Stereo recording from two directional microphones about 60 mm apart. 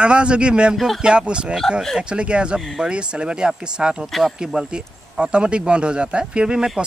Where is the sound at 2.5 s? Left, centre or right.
Centre.